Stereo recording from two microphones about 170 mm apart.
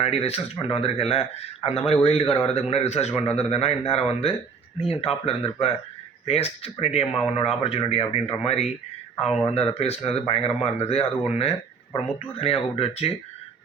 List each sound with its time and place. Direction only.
0.0 s speech: 35° left (ahead or behind)
9.7 s speech: 35° left (ahead or behind)